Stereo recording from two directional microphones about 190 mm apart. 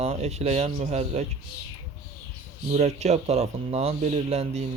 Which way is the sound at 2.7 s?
35° right (ahead or behind).